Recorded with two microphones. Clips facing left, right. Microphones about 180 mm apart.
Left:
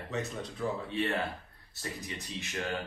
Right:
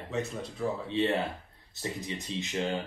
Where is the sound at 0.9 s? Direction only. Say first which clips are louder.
Right 4 dB; 20° right (ahead or behind).